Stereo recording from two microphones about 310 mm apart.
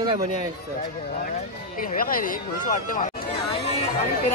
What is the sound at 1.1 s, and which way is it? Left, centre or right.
Speech, left.